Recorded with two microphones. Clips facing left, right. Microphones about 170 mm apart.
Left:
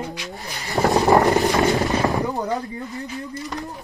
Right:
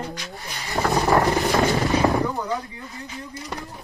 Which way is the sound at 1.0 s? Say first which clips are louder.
Left 3 dB; 20° left (ahead or behind).